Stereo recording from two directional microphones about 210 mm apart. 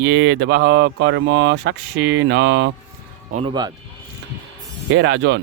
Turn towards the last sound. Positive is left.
turn(degrees=-60)  # may be behind; listen again after turning